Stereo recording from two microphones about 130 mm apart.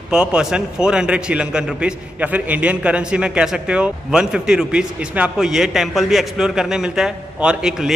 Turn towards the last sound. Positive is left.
turn(degrees=-5)  # may be behind; listen again after turning